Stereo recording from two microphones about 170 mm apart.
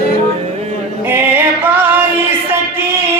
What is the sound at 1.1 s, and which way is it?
Music, 10° right (ahead or behind).